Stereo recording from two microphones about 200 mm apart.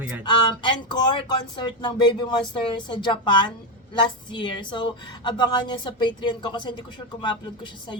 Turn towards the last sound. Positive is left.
turn(degrees=25)  # may be behind; listen again after turning